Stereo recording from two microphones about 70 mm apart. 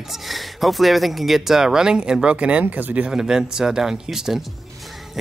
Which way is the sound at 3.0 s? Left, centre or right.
Centre.